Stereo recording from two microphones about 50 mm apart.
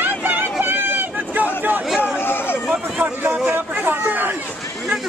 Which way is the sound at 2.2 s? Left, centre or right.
Left.